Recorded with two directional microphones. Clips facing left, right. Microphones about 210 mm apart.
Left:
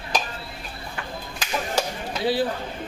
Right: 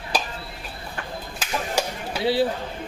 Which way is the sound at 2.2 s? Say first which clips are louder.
Right 2 dB; 25° right (ahead or behind).